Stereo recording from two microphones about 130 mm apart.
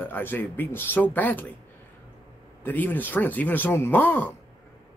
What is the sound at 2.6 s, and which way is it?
Speech, 15° left (ahead or behind).